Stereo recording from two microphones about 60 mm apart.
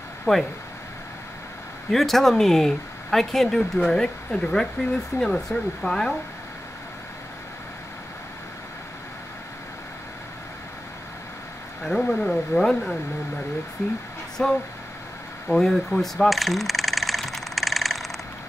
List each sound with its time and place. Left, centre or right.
0.2 s speech: centre
1.9 s speech: centre
11.8 s speech: centre
14.4 s speech: centre
15.4 s coin: centre